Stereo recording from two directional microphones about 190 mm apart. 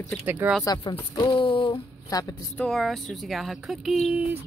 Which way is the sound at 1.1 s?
25° left (ahead or behind).